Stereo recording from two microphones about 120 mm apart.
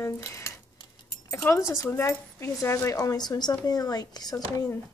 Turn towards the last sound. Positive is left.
turn(degrees=30)  # may be behind; listen again after turning